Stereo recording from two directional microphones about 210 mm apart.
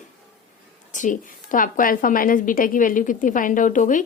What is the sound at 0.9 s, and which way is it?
A woman's voice, 35° left (ahead or behind).